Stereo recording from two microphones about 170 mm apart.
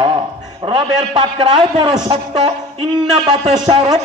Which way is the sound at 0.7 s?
30° right (ahead or behind).